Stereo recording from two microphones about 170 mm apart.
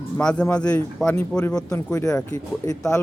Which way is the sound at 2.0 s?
20° left (ahead or behind).